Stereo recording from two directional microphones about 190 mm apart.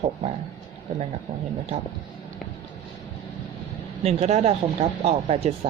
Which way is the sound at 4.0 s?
35° right (ahead or behind).